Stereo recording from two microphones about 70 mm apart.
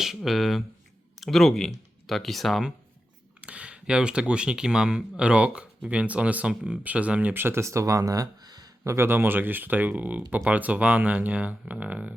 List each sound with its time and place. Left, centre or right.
0.2 s speech: centre
3.4 s speech: centre
7.3 s speech: right
7.6 s speech: right
8.8 s speech: right